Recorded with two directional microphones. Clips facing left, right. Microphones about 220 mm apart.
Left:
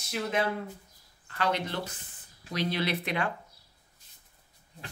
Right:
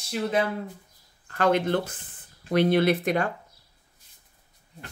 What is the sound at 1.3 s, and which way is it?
Speech, 50° right (ahead or behind).